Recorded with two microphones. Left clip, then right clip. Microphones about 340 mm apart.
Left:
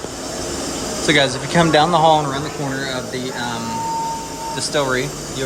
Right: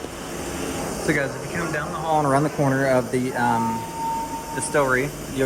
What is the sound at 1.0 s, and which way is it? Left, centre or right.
Speech, centre.